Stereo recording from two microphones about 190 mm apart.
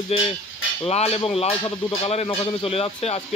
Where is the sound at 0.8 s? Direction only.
30° left (ahead or behind).